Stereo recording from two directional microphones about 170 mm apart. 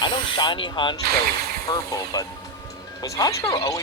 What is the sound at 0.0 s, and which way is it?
Speech, 30° left (ahead or behind).